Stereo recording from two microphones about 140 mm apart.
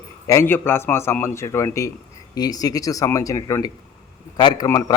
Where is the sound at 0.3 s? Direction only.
15° left (ahead or behind).